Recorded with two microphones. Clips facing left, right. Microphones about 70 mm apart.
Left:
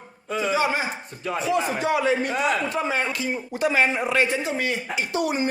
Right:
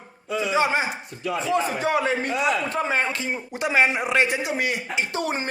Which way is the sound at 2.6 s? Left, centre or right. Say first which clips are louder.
Right 1 dB; right.